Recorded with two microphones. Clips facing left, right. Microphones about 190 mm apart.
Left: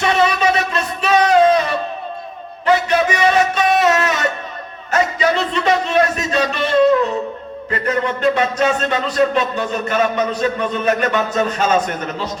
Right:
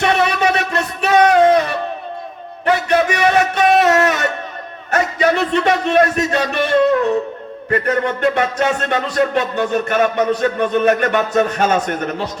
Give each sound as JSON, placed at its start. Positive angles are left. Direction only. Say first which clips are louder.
{"t": 0.0, "sound": "music", "louder": "even", "side_deg": -60}
{"t": 2.6, "sound": "a sound", "louder": "even", "side_deg": -60}
{"t": 7.7, "sound": "music", "louder": "right 2 dB", "side_deg": -60}